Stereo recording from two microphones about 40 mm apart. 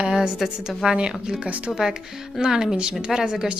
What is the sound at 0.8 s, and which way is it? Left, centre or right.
Speech, centre.